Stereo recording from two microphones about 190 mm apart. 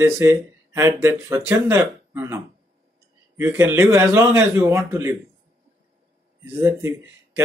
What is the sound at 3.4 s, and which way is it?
Speech, 10° right (ahead or behind).